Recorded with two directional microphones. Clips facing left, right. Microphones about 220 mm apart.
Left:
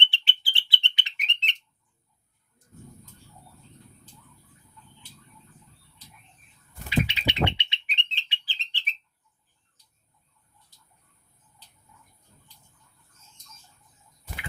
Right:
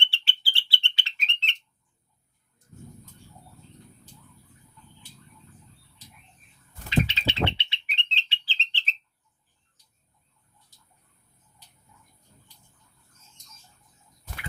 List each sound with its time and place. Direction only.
0.0 s bird: 20° left (ahead or behind)
7.1 s bird: 15° left (ahead or behind)